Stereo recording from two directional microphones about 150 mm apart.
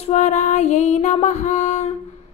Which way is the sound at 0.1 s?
55° left (ahead or behind).